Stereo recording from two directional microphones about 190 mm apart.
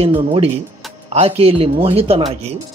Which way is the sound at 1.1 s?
30° right (ahead or behind).